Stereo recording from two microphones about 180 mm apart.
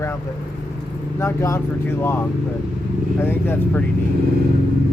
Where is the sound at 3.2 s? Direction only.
10° left (ahead or behind).